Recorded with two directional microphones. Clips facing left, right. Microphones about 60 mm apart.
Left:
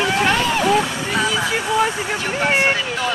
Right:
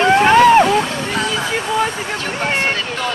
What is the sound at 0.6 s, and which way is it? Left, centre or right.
Vehicle, centre.